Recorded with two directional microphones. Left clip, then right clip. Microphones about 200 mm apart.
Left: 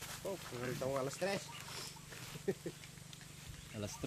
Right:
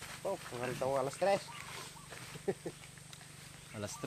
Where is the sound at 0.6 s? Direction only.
30° left (ahead or behind).